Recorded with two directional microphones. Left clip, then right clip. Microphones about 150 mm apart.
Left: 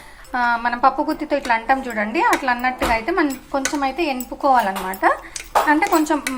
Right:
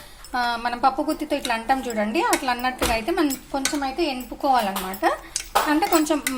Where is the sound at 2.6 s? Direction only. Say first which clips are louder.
Left 4 dB; 15° left (ahead or behind).